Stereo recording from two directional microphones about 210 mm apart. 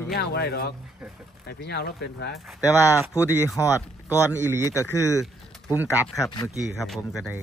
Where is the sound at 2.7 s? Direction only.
10° right (ahead or behind).